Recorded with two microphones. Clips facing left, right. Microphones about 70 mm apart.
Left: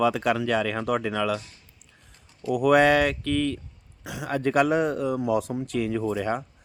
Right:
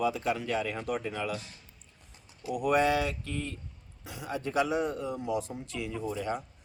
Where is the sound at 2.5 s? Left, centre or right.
Left.